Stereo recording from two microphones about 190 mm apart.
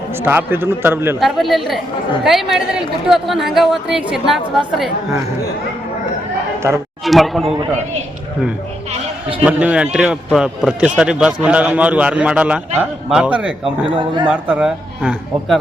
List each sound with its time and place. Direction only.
0.3 s a man's voice: 10° right (ahead or behind)
1.2 s speech: centre (ahead or behind)
7.0 s speech: centre (ahead or behind)
9.4 s a man's voice: 5° right (ahead or behind)
13.9 s a man's voice: 25° right (ahead or behind)
14.3 s speech: 5° right (ahead or behind)